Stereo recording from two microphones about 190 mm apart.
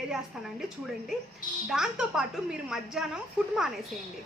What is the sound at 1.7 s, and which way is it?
A woman's voice, 5° right (ahead or behind).